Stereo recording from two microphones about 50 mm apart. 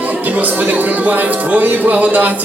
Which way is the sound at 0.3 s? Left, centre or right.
Right.